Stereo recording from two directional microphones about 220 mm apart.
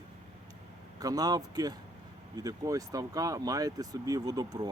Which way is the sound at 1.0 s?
15° right (ahead or behind).